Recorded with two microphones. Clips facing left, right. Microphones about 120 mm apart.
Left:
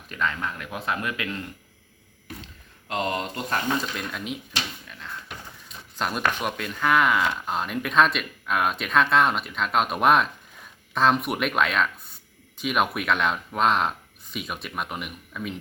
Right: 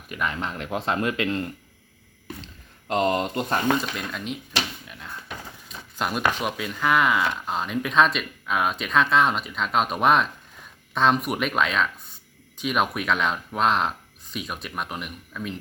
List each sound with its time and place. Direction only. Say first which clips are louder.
0.1 s speech: left 1 dB; 15° right (ahead or behind)
0.3 s speech: right 3 dB; 25° right (ahead or behind)
2.8 s speech: right 5 dB; 35° right (ahead or behind)
3.9 s speech: right 1 dB; centre (ahead or behind)
4.9 s a sound: even; 5° right (ahead or behind)
6.0 s speech: right 1 dB; 5° right (ahead or behind)